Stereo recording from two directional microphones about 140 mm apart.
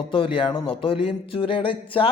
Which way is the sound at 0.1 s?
40° left (ahead or behind).